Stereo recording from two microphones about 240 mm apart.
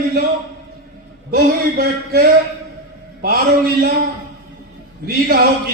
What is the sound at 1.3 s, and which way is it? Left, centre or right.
Speech, right.